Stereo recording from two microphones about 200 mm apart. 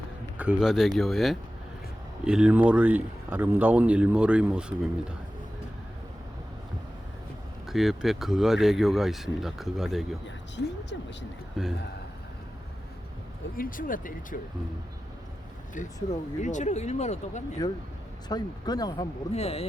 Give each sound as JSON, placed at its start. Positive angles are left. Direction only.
{"t": 0.3, "sound": "a man's voice", "side_deg": -5}
{"t": 7.7, "sound": "speech", "side_deg": 0}
{"t": 10.2, "sound": "speech", "side_deg": 60}
{"t": 11.6, "sound": "speech", "side_deg": 0}
{"t": 13.6, "sound": "speech", "side_deg": 45}
{"t": 16.4, "sound": "speech", "side_deg": 35}
{"t": 18.3, "sound": "speech", "side_deg": 20}
{"t": 19.3, "sound": "speech", "side_deg": 30}